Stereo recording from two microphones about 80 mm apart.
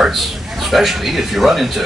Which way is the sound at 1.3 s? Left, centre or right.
Centre.